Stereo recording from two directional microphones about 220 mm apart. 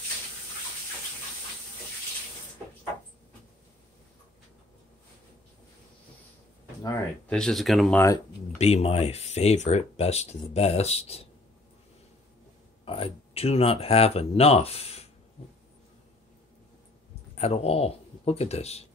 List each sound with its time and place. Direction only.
6.8 s speech: 10° left (ahead or behind)
8.5 s speech: 30° left (ahead or behind)
12.8 s speech: 25° left (ahead or behind)
17.4 s speech: 30° left (ahead or behind)